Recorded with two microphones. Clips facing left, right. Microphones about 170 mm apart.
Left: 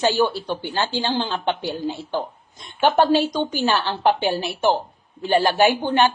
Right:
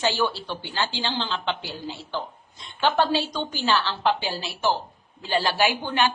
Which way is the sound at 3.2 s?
45° left (ahead or behind).